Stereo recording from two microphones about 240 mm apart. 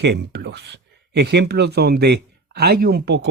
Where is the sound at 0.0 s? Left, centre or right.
Right.